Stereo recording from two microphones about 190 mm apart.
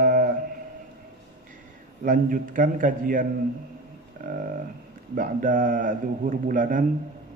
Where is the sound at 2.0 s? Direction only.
45° right (ahead or behind).